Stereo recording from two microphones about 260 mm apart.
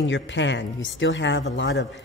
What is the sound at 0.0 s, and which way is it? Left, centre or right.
A woman's voice, left.